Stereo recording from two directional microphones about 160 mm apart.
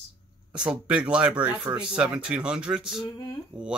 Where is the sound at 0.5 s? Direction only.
5° right (ahead or behind).